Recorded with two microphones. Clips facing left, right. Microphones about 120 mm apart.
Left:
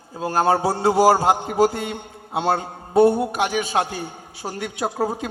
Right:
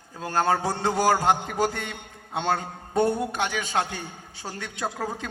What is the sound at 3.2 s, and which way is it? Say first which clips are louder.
Speech: left 5 dB; 10° left (ahead or behind).